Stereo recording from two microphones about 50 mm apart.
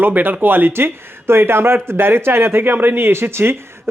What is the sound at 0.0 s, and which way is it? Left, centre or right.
Speech, right.